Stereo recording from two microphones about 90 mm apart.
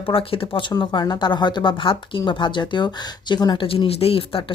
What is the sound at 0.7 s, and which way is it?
Speech, 50° left (ahead or behind).